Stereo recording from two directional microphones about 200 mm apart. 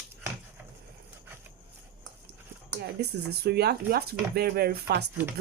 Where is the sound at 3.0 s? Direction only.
55° right (ahead or behind).